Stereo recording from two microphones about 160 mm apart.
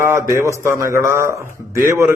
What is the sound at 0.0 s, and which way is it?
A man's voice, 15° right (ahead or behind).